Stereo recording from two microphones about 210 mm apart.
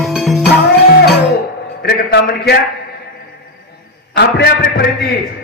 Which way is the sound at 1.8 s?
50° left (ahead or behind).